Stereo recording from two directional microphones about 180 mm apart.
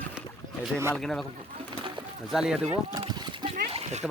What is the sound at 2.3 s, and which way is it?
Speech, 5° right (ahead or behind).